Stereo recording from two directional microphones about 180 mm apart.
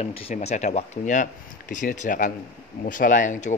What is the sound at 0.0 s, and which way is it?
Speech, 35° left (ahead or behind).